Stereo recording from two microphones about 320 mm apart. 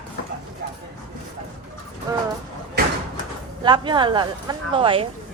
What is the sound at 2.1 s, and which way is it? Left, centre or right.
Speech, centre.